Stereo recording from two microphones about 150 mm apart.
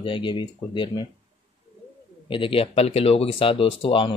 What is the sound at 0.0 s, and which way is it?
Speech, 35° left (ahead or behind).